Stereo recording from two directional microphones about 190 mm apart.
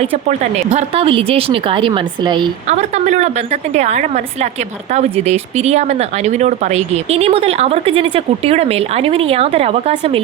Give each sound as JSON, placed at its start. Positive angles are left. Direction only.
{"t": 0.0, "sound": "speech", "side_deg": -35}
{"t": 2.6, "sound": "speech", "side_deg": -35}